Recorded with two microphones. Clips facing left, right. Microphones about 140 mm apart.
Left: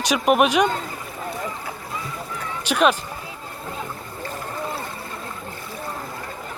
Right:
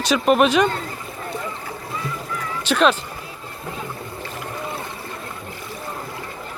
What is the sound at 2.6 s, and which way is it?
Speech, 10° left (ahead or behind).